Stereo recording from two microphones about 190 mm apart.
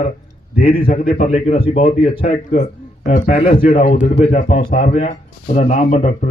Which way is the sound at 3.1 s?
35° left (ahead or behind).